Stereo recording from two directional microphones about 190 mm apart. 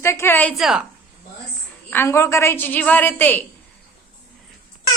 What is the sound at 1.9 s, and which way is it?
A woman's voice, 15° left (ahead or behind).